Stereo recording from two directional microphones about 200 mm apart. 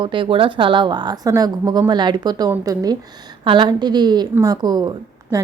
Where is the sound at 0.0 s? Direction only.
25° right (ahead or behind).